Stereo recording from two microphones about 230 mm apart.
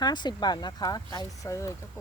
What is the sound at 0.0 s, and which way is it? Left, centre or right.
Speech, centre.